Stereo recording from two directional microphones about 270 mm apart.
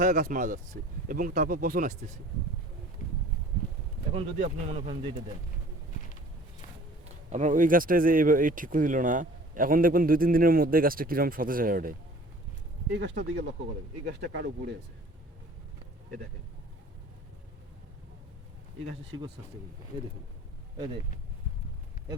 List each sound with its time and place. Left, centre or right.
0.0 s speech: right
4.1 s speech: right
7.3 s speech: right